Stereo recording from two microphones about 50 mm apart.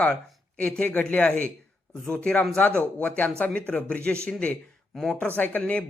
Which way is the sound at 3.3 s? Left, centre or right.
Left.